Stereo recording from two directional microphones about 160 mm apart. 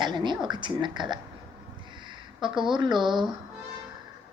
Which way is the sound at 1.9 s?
30° right (ahead or behind).